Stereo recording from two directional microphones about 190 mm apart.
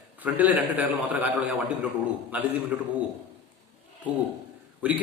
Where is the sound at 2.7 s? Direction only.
5° right (ahead or behind).